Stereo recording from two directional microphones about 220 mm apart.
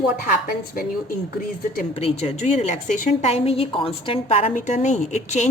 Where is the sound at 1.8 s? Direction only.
30° left (ahead or behind).